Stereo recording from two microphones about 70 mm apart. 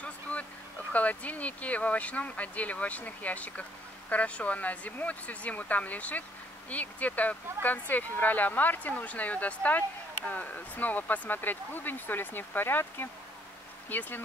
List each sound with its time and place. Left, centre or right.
0.0 s vehicle: left
0.9 s speech: left